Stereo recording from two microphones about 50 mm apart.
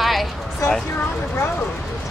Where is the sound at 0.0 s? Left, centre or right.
Centre.